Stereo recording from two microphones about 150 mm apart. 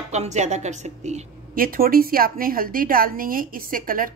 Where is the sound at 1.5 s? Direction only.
75° right (ahead or behind).